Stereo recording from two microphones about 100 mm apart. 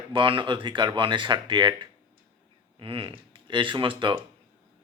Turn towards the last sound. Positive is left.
turn(degrees=-55)  # may be behind; listen again after turning